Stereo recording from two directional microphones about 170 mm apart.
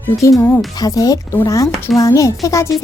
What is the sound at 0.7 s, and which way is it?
A child's voice, 20° left (ahead or behind).